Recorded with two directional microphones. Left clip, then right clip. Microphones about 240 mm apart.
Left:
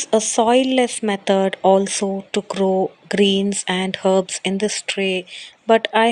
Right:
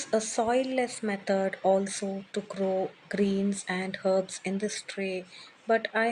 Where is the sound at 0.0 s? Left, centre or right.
Left.